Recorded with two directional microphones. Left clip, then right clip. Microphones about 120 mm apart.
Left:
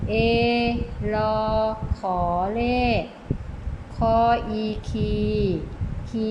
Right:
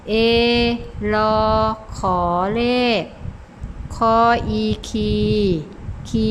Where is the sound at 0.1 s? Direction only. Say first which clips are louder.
Right 5 dB; 40° right (ahead or behind).